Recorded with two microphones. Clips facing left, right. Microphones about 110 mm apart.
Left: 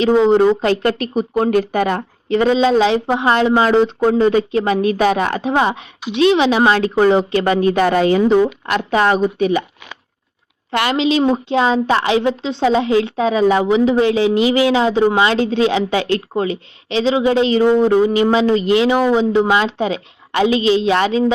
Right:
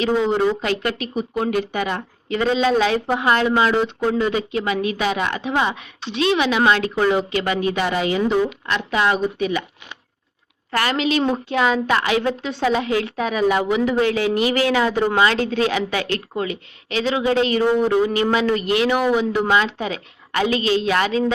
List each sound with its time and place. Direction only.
0.0 s speech: 30° left (ahead or behind)
10.7 s a woman's voice: 25° left (ahead or behind)